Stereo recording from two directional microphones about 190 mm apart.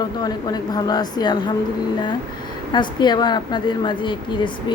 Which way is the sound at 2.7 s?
25° left (ahead or behind).